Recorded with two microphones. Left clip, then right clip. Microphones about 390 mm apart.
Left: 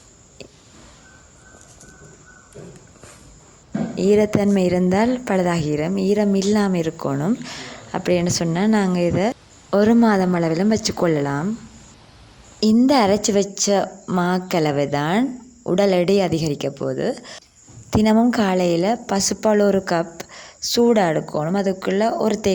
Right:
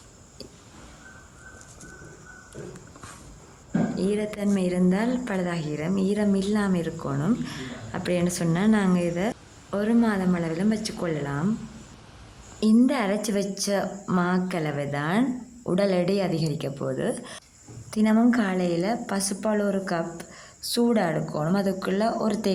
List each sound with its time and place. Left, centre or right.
3.9 s a woman's voice: right
12.5 s a woman's voice: right